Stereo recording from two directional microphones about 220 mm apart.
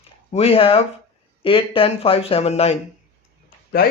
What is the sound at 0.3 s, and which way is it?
Speech, 25° left (ahead or behind).